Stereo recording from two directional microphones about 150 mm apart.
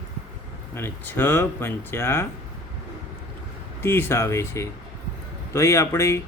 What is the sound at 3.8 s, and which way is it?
A man's voice, 15° left (ahead or behind).